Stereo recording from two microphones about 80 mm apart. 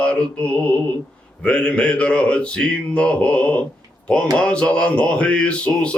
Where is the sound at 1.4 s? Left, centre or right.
Centre.